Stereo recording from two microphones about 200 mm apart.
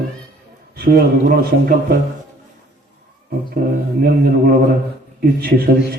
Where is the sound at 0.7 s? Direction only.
55° right (ahead or behind).